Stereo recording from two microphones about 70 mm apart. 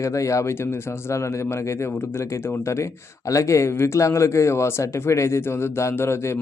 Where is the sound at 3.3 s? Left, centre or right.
Left.